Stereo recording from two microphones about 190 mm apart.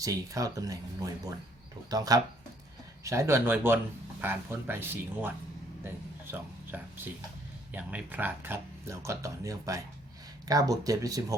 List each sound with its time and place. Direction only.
0.0 s speech: 15° right (ahead or behind)
1.9 s speech: 20° right (ahead or behind)
6.3 s speech: 10° right (ahead or behind)